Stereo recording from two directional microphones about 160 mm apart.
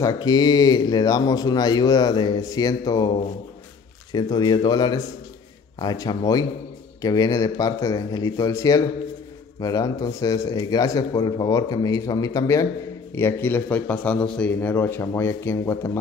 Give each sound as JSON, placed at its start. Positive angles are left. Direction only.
{"t": 0.0, "sound": "speech", "side_deg": 25}